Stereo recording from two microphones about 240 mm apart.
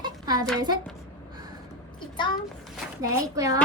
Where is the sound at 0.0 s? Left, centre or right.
Centre.